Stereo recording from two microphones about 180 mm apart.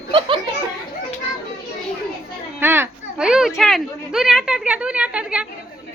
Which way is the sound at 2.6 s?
10° right (ahead or behind).